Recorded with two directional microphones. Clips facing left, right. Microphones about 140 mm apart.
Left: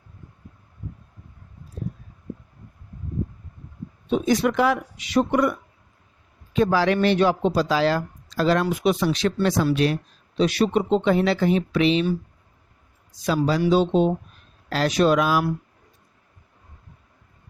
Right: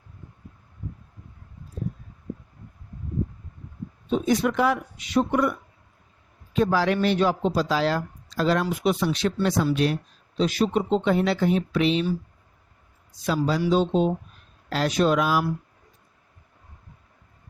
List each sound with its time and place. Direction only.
4.1 s speech: 80° left
13.2 s speech: 90° left
13.6 s speech: 70° left (ahead or behind)
14.7 s speech: 90° left